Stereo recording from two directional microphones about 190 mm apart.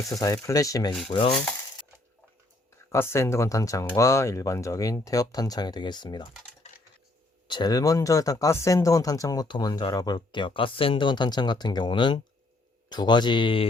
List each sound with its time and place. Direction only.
0.1 s speech: 20° left (ahead or behind)
2.9 s speech: 15° left (ahead or behind)
7.4 s speech: 25° left (ahead or behind)